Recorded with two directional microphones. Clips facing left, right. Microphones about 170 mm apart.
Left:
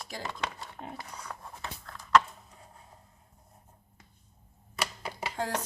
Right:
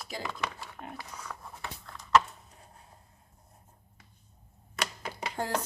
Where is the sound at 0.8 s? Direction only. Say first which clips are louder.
Left 1 dB; 20° left (ahead or behind).